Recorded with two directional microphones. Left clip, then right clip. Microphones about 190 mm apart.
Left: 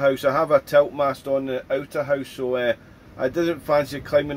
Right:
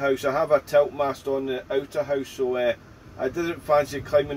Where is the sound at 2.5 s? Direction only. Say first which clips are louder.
Left 4 dB; 55° left (ahead or behind).